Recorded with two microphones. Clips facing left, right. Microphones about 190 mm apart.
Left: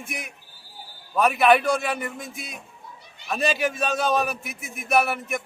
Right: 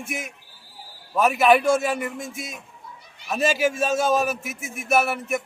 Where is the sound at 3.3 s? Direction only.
5° right (ahead or behind).